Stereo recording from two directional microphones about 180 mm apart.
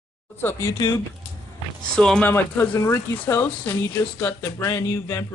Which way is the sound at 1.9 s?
5° left (ahead or behind).